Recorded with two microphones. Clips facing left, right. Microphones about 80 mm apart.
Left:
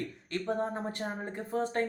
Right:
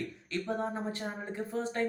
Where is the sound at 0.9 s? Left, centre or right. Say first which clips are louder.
Left 1 dB; left.